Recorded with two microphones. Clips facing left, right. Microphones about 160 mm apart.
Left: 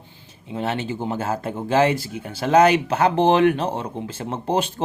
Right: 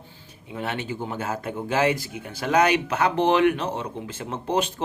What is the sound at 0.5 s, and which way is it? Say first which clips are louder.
Speech: left 4 dB; 30° left (ahead or behind).